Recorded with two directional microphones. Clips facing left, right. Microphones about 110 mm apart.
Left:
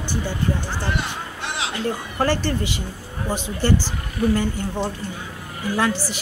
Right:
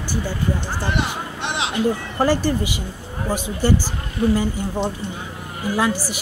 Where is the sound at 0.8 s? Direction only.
20° right (ahead or behind).